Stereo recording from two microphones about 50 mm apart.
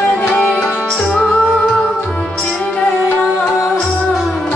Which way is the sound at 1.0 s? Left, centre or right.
Centre.